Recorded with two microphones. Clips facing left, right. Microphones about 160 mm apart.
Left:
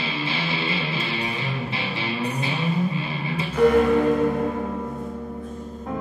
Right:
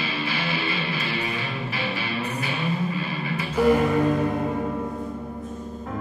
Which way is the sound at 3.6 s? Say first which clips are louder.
Left 1 dB; 5° right (ahead or behind).